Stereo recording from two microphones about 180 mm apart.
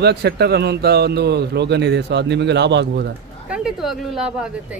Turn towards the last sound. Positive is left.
turn(degrees=-5)  # may be behind; listen again after turning